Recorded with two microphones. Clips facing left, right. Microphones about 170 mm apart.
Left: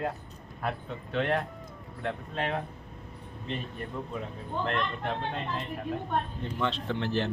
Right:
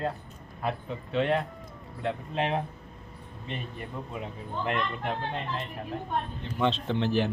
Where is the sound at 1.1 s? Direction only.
Centre (ahead or behind).